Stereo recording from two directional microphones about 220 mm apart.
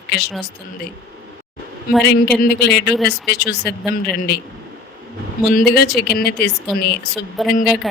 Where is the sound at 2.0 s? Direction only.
50° left (ahead or behind).